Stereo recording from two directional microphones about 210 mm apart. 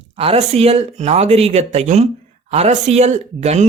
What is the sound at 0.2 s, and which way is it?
Speech, 30° right (ahead or behind).